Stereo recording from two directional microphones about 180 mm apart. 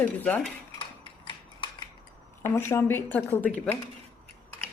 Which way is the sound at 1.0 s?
25° left (ahead or behind).